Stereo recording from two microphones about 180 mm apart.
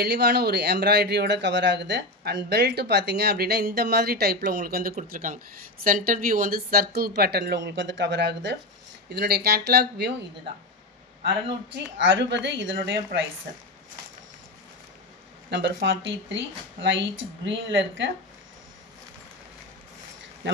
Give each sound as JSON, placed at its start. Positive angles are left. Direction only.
{"t": 0.0, "sound": "speech", "side_deg": -65}
{"t": 9.1, "sound": "speech", "side_deg": -60}
{"t": 11.7, "sound": "a woman's voice", "side_deg": -90}
{"t": 12.7, "sound": "speech", "side_deg": -70}
{"t": 15.5, "sound": "a woman's voice", "side_deg": -70}